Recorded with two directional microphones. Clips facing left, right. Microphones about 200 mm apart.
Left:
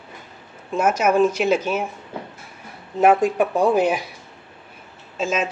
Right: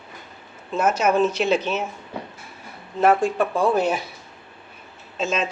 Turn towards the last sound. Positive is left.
turn(degrees=5)  # may be behind; listen again after turning